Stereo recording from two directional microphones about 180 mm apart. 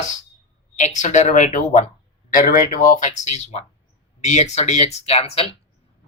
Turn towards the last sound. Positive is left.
turn(degrees=30)  # may be behind; listen again after turning